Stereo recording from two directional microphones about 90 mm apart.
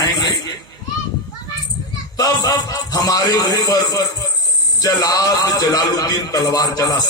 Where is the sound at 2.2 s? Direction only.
45° left (ahead or behind).